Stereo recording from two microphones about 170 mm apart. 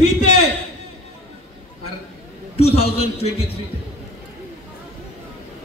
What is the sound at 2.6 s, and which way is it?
Speech, 35° left (ahead or behind).